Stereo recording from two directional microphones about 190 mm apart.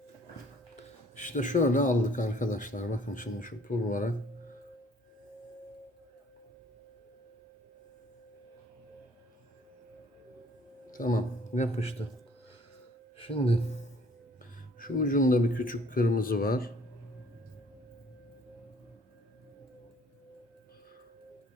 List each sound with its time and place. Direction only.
1.1 s speech: 40° left (ahead or behind)
10.9 s a man's voice: 45° left (ahead or behind)
13.1 s speech: 30° left (ahead or behind)
14.8 s speech: 45° left (ahead or behind)